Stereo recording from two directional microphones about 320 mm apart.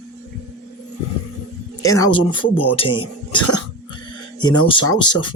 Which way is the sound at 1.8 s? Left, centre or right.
Centre.